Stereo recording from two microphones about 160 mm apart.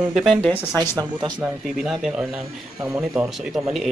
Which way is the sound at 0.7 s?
25° right (ahead or behind).